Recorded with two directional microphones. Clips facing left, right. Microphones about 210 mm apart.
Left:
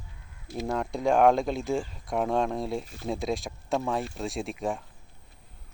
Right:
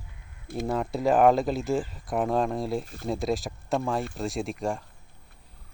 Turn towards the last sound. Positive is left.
turn(degrees=0)  # may be behind; listen again after turning